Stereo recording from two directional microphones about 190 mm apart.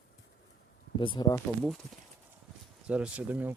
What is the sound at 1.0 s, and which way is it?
Speech, 25° left (ahead or behind).